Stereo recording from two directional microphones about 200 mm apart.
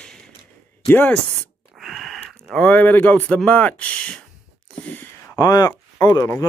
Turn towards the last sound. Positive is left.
turn(degrees=15)  # may be behind; listen again after turning